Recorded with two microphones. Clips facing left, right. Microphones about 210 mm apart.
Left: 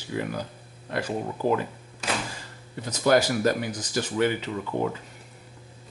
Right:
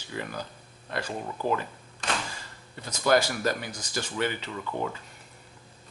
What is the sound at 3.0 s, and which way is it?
Speech, 15° left (ahead or behind).